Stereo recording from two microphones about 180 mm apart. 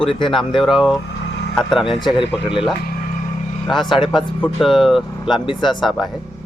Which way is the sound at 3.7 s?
Centre (ahead or behind).